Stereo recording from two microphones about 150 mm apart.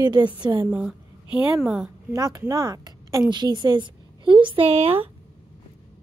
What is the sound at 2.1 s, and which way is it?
A woman's voice, 25° right (ahead or behind).